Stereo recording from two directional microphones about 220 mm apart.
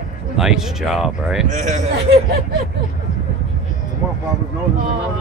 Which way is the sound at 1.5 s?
30° right (ahead or behind).